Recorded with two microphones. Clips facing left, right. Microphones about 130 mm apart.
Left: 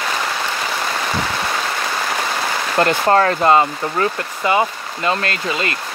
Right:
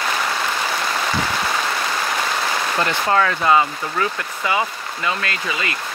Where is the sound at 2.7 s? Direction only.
45° left (ahead or behind).